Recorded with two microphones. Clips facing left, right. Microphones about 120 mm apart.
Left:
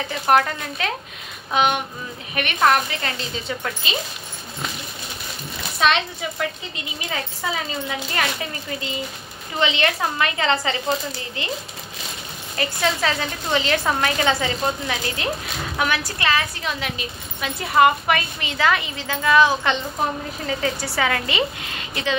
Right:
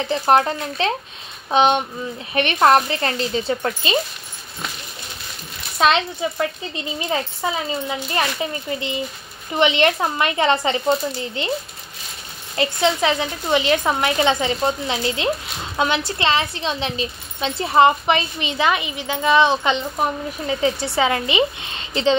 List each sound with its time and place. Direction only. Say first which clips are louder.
0.1 s a woman's voice: right 2 dB; 30° right (ahead or behind)
5.8 s a woman's voice: right 3 dB; 30° right (ahead or behind)
12.5 s a woman's voice: right 4 dB; 20° right (ahead or behind)